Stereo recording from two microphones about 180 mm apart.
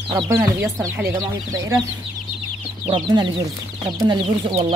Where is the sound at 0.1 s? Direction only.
15° right (ahead or behind).